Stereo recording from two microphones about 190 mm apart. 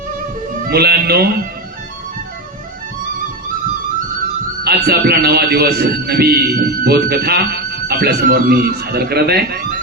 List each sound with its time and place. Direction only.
0.7 s a man's voice: 55° right (ahead or behind)
4.6 s a man's voice: 55° right (ahead or behind)